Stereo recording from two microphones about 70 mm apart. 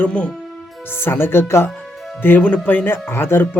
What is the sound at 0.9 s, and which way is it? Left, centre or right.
Speech, left.